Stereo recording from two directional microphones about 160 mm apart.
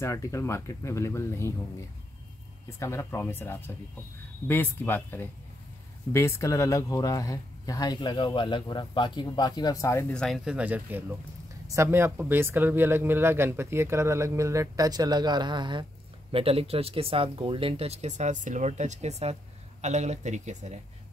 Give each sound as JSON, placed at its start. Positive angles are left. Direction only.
{"t": 0.0, "sound": "speech", "side_deg": 20}
{"t": 2.8, "sound": "speech", "side_deg": 15}
{"t": 10.1, "sound": "speech", "side_deg": 0}